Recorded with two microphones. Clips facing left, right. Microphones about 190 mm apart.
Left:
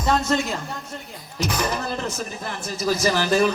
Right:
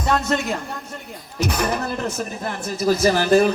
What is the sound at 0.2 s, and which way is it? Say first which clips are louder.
A woman's voice: even; 60° right (ahead or behind).